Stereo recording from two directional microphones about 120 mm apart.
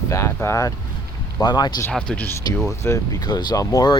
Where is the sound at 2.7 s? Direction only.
25° left (ahead or behind).